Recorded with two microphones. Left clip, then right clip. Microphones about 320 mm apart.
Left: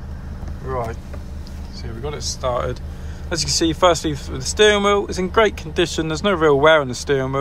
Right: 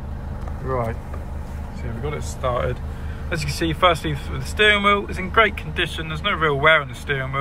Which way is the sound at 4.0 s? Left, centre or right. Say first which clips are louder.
Left 3 dB; left.